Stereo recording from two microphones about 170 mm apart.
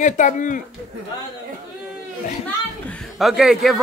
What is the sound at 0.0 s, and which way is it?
Speech, 45° left (ahead or behind).